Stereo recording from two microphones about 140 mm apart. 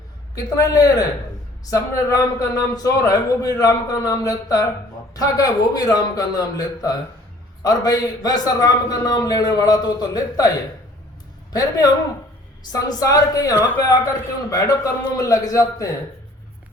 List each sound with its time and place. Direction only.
0.3 s a man's voice: 25° left (ahead or behind)
12.7 s a man's voice: 25° left (ahead or behind)